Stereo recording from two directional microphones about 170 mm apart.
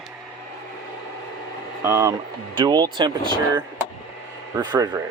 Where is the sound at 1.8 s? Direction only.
15° right (ahead or behind).